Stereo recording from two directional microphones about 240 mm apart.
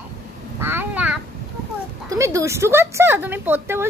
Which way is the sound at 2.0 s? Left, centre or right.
Centre.